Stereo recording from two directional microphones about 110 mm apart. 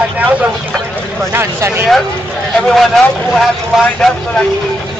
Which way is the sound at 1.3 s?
25° right (ahead or behind).